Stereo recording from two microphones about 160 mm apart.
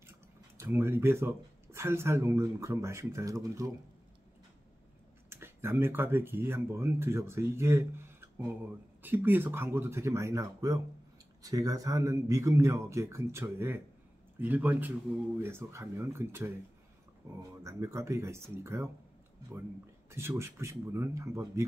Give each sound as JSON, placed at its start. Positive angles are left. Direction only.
{"t": 0.6, "sound": "speech", "side_deg": -15}
{"t": 5.3, "sound": "a man's voice", "side_deg": -15}
{"t": 20.1, "sound": "speech", "side_deg": -15}